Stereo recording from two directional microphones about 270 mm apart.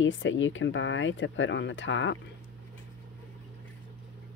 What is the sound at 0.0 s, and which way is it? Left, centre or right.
Speech, left.